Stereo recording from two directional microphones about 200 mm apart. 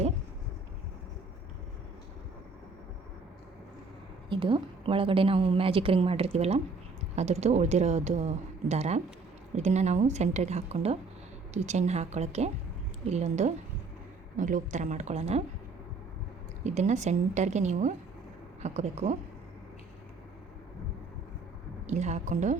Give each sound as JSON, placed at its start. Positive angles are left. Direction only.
{"t": 4.3, "sound": "a woman's voice", "side_deg": -25}
{"t": 16.6, "sound": "a woman's voice", "side_deg": -35}
{"t": 21.8, "sound": "a woman's voice", "side_deg": -35}